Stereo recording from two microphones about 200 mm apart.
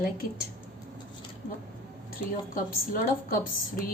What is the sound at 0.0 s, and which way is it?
Speech, 45° left (ahead or behind).